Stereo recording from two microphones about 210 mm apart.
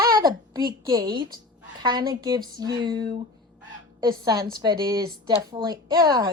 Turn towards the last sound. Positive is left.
turn(degrees=-20)  # may be behind; listen again after turning